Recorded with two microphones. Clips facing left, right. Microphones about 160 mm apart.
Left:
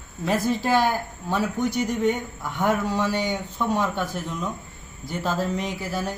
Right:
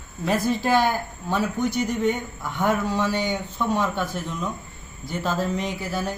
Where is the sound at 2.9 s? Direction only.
40° left (ahead or behind).